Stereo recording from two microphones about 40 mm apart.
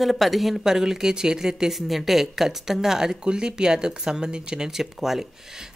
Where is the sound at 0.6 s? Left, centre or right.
Centre.